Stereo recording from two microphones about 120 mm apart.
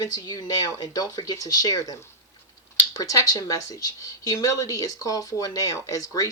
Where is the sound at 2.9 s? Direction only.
30° left (ahead or behind).